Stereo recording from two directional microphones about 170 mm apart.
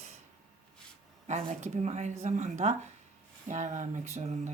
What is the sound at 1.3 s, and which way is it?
Speech, 40° right (ahead or behind).